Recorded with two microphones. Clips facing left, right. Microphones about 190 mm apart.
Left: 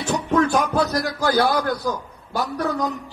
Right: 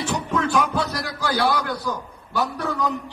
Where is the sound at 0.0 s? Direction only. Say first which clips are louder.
Left 4 dB; 45° left (ahead or behind).